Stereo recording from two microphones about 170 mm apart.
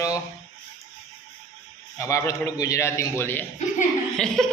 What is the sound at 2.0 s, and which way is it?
A man's voice, 20° left (ahead or behind).